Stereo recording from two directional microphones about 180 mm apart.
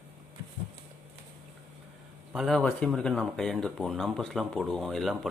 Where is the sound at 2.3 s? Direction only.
Centre (ahead or behind).